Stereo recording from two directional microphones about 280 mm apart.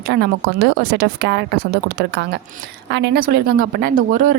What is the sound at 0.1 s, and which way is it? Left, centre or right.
Speech, right.